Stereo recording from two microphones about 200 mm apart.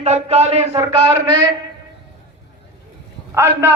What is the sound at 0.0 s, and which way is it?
Speech, 30° right (ahead or behind).